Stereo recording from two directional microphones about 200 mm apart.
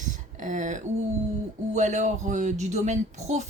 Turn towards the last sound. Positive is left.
turn(degrees=-35)  # may be behind; listen again after turning